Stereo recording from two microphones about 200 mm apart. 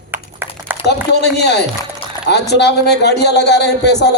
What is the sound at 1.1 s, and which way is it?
A man's voice, 55° left (ahead or behind).